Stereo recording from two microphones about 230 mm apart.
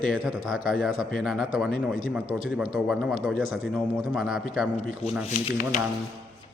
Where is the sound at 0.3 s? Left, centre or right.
Centre.